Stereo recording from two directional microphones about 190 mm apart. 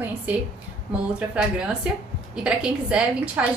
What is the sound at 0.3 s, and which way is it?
A woman's voice, 10° right (ahead or behind).